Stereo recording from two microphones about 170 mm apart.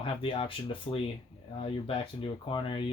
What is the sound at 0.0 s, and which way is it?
Speech, 30° left (ahead or behind).